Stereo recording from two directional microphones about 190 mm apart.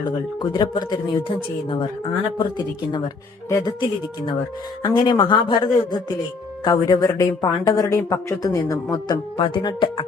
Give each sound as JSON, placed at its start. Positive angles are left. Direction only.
{"t": 0.3, "sound": "speech", "side_deg": 20}